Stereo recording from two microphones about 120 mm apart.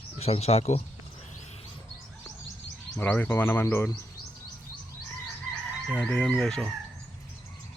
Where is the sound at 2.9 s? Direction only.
15° left (ahead or behind).